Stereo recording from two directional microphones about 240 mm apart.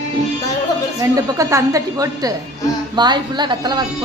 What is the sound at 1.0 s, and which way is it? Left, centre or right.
A woman's voice, centre.